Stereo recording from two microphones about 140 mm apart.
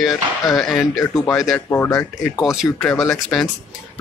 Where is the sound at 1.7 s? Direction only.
15° left (ahead or behind).